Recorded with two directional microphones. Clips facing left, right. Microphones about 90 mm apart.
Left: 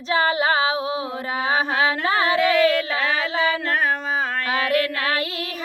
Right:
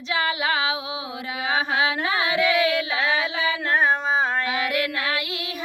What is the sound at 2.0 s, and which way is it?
Singing, 40° left (ahead or behind).